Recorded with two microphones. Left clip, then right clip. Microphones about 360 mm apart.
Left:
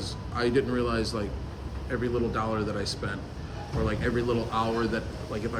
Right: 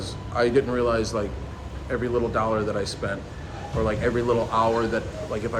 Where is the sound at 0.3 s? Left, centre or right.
Centre.